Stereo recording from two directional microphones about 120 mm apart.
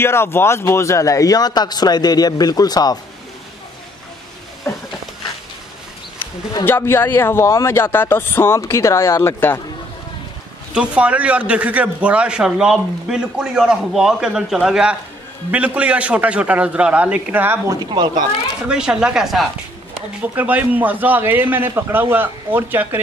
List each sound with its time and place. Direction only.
0.0 s a man's voice: 20° left (ahead or behind)
4.7 s a sound: 25° left (ahead or behind)
6.6 s speech: 20° left (ahead or behind)
10.7 s a man's voice: 10° right (ahead or behind)
17.6 s speech: 35° right (ahead or behind)
18.7 s a man's voice: 5° right (ahead or behind)